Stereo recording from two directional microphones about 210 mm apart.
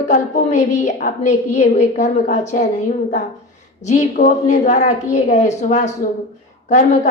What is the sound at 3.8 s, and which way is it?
A woman's voice, 35° left (ahead or behind).